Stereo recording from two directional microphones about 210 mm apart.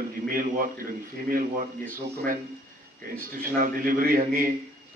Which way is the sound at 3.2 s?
45° right (ahead or behind).